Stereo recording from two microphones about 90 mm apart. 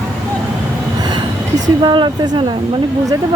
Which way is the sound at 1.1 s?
55° right (ahead or behind).